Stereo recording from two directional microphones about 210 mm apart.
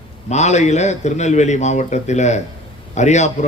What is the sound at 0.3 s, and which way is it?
A man's voice, 35° left (ahead or behind).